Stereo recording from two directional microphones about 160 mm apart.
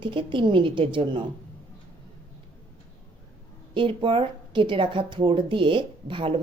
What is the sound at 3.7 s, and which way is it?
Speech, 30° right (ahead or behind).